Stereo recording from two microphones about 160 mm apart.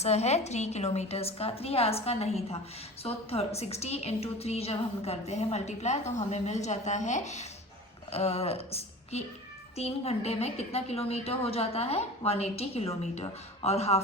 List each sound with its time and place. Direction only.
0.0 s a woman's voice: 45° left (ahead or behind)